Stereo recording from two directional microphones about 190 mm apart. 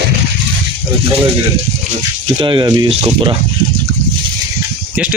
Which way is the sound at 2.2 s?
25° right (ahead or behind).